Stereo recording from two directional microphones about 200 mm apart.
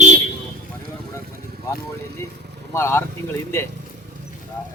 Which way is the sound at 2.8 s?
15° left (ahead or behind).